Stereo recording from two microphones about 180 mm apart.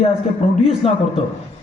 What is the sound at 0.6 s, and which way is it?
Speech, 35° left (ahead or behind).